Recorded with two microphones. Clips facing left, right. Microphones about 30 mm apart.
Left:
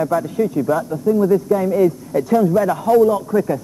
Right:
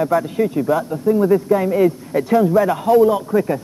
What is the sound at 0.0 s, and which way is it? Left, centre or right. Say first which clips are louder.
A man's voice: right 1 dB; right.